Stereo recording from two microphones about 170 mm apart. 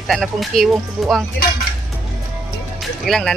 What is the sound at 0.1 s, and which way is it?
Speech, centre (ahead or behind).